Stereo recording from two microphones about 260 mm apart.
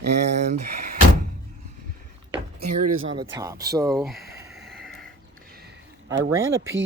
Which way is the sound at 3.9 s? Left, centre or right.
Centre.